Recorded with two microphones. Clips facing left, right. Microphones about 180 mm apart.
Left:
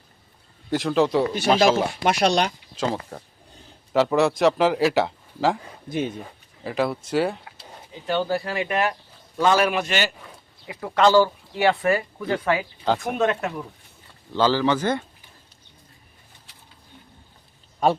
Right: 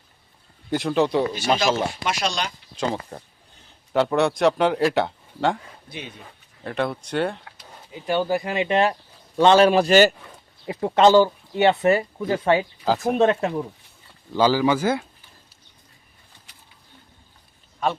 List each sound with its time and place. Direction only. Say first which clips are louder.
0.7 s a man's voice: even; centre (ahead or behind)
2.0 s speech: left 6 dB; 60° left (ahead or behind)
2.7 s a man's voice: right 1 dB; centre (ahead or behind)
5.9 s speech: left 11 dB; 45° left (ahead or behind)
6.7 s a man's voice: left 1 dB; 5° left (ahead or behind)
8.0 s a man's voice: right 1 dB; 15° right (ahead or behind)
12.8 s a man's voice: right 2 dB; centre (ahead or behind)
13.1 s speech: right 4 dB; 30° right (ahead or behind)
14.3 s speech: right 1 dB; 10° right (ahead or behind)